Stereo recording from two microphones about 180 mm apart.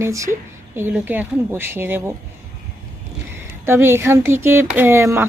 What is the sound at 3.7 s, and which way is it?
Speech, 15° right (ahead or behind).